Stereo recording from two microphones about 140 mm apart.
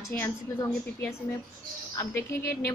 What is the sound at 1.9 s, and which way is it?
Speech, 20° left (ahead or behind).